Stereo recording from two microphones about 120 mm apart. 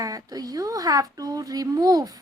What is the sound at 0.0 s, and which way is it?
Speech, 30° right (ahead or behind).